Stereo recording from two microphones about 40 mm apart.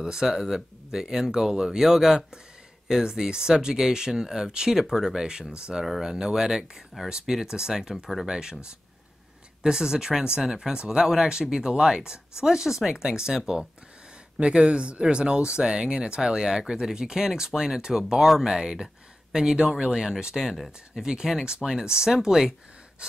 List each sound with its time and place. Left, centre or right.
0.0 s speech: centre
7.9 s speech: centre
8.3 s speech: centre
9.6 s speech: centre
14.4 s speech: right
20.5 s speech: centre
21.0 s speech: centre